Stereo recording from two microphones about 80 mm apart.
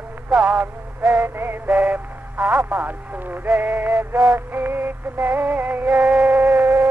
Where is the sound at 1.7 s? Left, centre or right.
Centre.